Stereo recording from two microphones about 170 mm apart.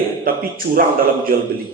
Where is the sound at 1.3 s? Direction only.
60° right (ahead or behind).